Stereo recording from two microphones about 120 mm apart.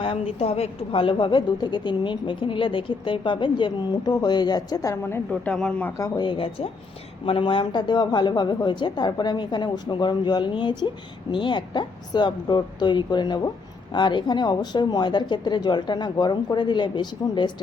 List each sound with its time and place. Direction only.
0.0 s a woman's voice: 50° left (ahead or behind); by 5.2 s 25° left (ahead or behind)
5.3 s speech: 10° left (ahead or behind)
6.0 s a woman's voice: 40° left (ahead or behind)